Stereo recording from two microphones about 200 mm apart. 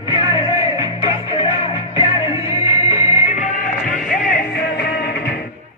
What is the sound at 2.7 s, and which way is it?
Music, 15° right (ahead or behind).